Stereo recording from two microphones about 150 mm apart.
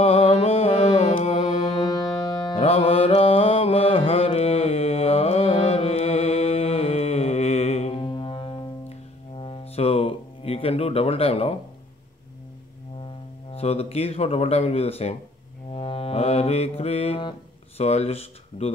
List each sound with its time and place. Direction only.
0.0 s mantra: 45° left (ahead or behind)
2.2 s music: 30° left (ahead or behind)
2.6 s mantra: 40° left (ahead or behind)
9.4 s music: 40° left (ahead or behind)
13.0 s speech: 40° left (ahead or behind)
15.7 s music: 40° left (ahead or behind)
17.8 s speech: 45° left (ahead or behind)